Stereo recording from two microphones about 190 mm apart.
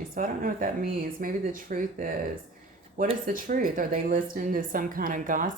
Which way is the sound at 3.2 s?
45° right (ahead or behind).